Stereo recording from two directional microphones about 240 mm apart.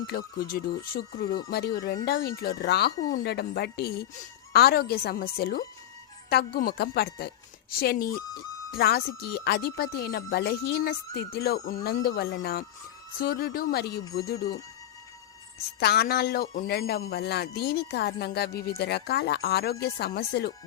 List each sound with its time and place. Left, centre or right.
0.1 s speech: left
14.3 s speech: centre
15.8 s speech: left